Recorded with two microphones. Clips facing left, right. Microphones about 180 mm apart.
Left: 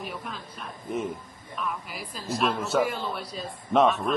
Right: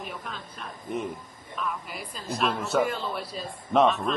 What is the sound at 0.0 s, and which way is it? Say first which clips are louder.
A man's voice: left 1 dB; 5° left (ahead or behind).